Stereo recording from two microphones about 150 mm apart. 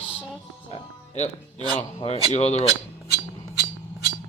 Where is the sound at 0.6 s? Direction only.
45° left (ahead or behind).